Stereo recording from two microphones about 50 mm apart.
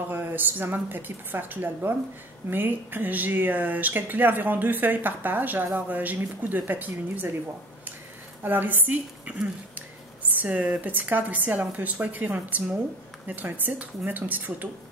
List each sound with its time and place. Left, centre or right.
0.1 s a woman's voice: right
8.5 s speech: right